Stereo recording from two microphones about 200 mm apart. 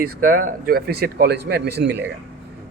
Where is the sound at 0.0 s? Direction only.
45° right (ahead or behind).